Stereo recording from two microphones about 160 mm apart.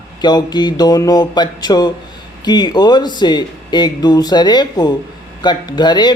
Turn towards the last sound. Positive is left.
turn(degrees=25)  # may be behind; listen again after turning